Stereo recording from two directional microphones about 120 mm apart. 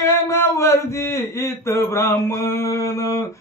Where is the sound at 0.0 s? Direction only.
25° left (ahead or behind).